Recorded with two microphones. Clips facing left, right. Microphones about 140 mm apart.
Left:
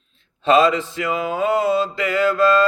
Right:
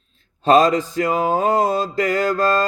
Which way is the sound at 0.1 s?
40° right (ahead or behind).